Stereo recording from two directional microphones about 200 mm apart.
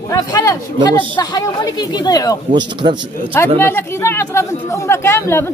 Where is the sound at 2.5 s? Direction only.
20° right (ahead or behind).